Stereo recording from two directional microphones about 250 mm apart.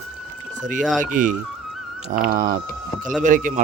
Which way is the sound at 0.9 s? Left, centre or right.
Right.